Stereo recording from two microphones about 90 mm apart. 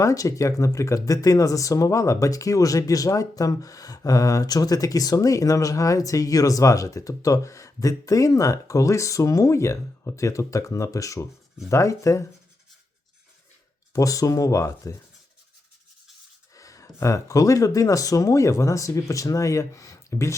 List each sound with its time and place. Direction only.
0.0 s speech: 40° left (ahead or behind)
13.9 s speech: 40° left (ahead or behind)
16.6 s speech: 40° left (ahead or behind)